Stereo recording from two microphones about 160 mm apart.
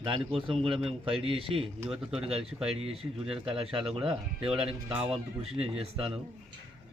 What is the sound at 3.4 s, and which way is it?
Speech, 35° right (ahead or behind).